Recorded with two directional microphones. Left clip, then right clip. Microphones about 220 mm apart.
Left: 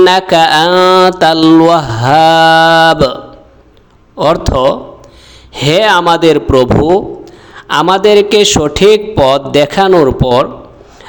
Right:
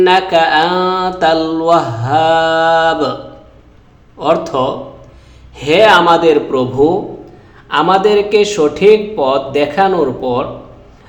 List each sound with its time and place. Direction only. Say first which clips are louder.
0.0 s speech: left 3 dB; 40° left (ahead or behind)
4.2 s a man's voice: left 4 dB; 40° left (ahead or behind)